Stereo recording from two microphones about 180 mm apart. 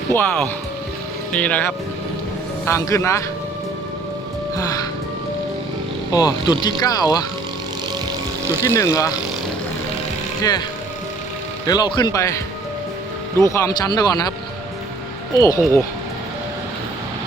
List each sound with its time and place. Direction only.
0.1 s a man's voice: 10° left (ahead or behind)
4.5 s speech: 20° left (ahead or behind)
6.1 s speech: 25° left (ahead or behind)
8.6 s a man's voice: 15° left (ahead or behind)
11.6 s speech: 20° left (ahead or behind)
13.5 s speech: 15° left (ahead or behind)
15.4 s speech: 20° left (ahead or behind)